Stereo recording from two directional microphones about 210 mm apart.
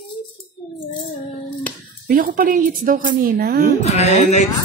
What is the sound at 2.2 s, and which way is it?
A woman's voice, 45° right (ahead or behind).